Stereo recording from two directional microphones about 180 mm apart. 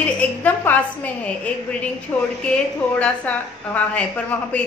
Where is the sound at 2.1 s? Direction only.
10° left (ahead or behind).